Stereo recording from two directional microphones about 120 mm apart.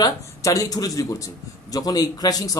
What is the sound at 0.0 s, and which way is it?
A man's voice, 30° left (ahead or behind).